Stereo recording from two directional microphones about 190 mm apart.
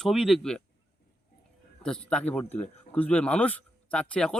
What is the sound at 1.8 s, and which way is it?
Speech, 5° left (ahead or behind).